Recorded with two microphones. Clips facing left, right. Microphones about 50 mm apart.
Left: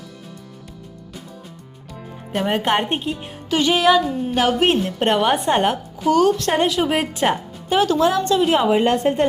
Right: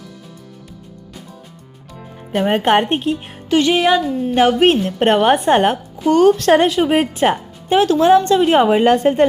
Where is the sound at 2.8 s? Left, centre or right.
Right.